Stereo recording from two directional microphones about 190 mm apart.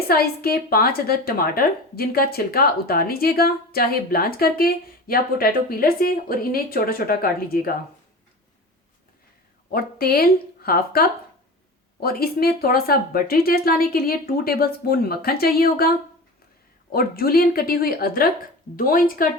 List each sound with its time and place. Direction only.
0.1 s a woman's voice: 55° left (ahead or behind)
9.7 s a woman's voice: 55° left (ahead or behind)
16.9 s a woman's voice: 50° left (ahead or behind)